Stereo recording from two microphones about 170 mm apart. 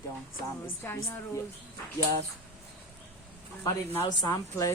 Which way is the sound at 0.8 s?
15° left (ahead or behind).